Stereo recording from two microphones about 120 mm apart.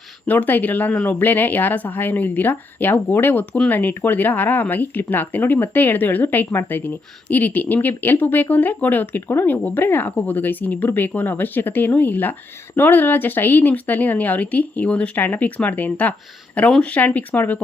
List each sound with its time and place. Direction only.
0.3 s speech: 15° left (ahead or behind)